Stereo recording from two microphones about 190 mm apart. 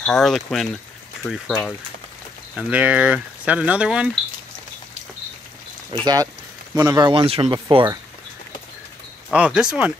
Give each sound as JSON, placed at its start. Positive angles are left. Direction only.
{"t": 0.0, "sound": "speech", "side_deg": 0}
{"t": 2.5, "sound": "speech", "side_deg": -5}
{"t": 5.9, "sound": "speech", "side_deg": -25}
{"t": 9.3, "sound": "speech", "side_deg": -5}